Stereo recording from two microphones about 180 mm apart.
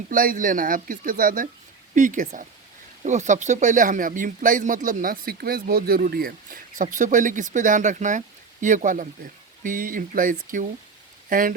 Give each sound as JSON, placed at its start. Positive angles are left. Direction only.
{"t": 0.1, "sound": "speech", "side_deg": -50}